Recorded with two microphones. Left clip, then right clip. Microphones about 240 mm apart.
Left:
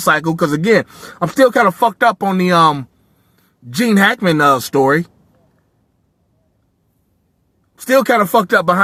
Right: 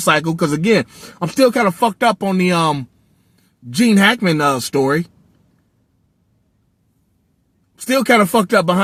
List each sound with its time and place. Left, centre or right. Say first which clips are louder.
0.1 s speech: left 1 dB; left
8.1 s speech: left 1 dB; left